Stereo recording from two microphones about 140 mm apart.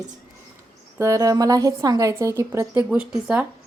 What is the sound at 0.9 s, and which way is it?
A woman's voice, 20° right (ahead or behind).